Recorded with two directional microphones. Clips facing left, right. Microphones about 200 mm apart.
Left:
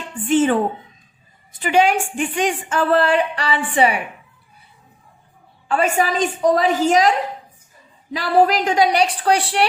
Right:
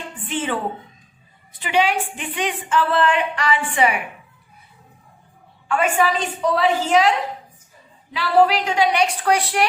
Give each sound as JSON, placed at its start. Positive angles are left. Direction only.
{"t": 0.3, "sound": "a woman's voice", "side_deg": 45}
{"t": 1.5, "sound": "a woman's voice", "side_deg": 45}
{"t": 5.6, "sound": "a woman's voice", "side_deg": 35}
{"t": 8.1, "sound": "a woman's voice", "side_deg": 45}